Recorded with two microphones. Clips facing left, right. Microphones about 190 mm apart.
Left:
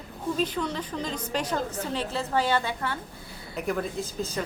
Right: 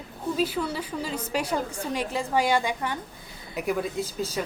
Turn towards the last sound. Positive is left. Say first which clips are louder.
# right 2 dB
turn(degrees=-5)  # may be behind; listen again after turning